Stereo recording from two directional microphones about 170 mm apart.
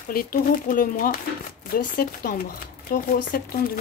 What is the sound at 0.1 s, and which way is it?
Speech, 55° left (ahead or behind).